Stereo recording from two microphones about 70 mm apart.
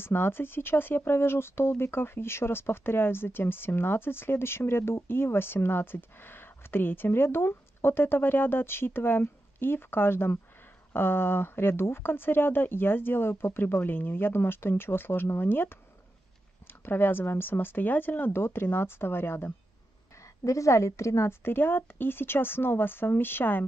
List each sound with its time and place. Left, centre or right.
0.0 s speech: left
16.8 s speech: left
20.4 s speech: left